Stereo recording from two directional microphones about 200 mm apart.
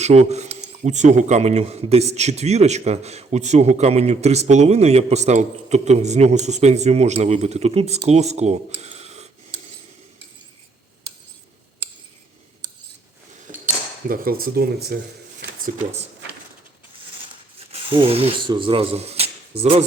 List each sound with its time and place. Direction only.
0.0 s speech: 35° right (ahead or behind)
13.5 s cutlery: 40° right (ahead or behind)
14.1 s speech: 45° right (ahead or behind)
17.6 s speech: 30° right (ahead or behind)